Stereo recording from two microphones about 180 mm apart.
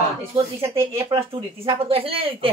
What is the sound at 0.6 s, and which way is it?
Speech, 15° right (ahead or behind).